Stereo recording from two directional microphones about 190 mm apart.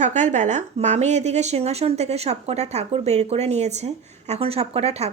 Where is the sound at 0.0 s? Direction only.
40° right (ahead or behind).